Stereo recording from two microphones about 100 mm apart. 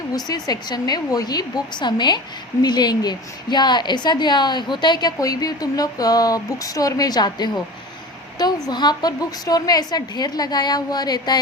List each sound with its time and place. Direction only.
0.3 s a woman's voice: 40° left (ahead or behind)